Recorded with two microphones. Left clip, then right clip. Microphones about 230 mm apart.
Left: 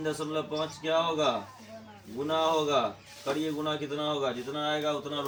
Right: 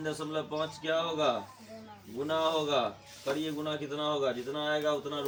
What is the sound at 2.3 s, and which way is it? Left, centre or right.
Speech, centre.